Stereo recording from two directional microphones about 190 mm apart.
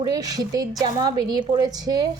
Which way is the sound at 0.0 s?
20° right (ahead or behind).